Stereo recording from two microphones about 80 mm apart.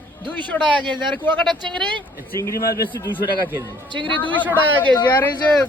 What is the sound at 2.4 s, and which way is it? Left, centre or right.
Speech, left.